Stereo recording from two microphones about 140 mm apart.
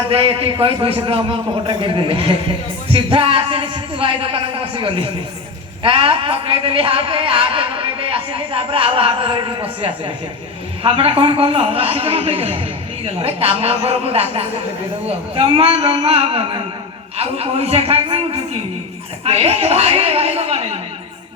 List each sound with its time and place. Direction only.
0.1 s speech: 40° right (ahead or behind)
2.9 s a sound: 40° right (ahead or behind)
4.8 s a man's voice: 40° right (ahead or behind)